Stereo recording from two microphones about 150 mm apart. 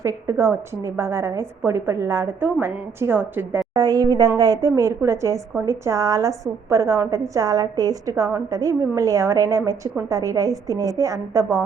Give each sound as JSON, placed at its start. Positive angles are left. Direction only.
{"t": 0.0, "sound": "a woman's voice", "side_deg": -20}
{"t": 3.8, "sound": "a woman's voice", "side_deg": -25}